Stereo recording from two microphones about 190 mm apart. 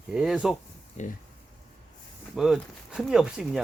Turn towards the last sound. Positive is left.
turn(degrees=-5)  # may be behind; listen again after turning